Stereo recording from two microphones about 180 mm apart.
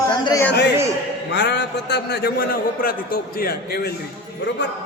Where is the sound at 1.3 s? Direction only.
75° left (ahead or behind); by 3.9 s 60° left (ahead or behind).